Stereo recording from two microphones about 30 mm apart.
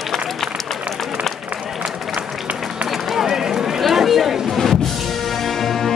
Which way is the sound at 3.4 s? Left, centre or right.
Centre.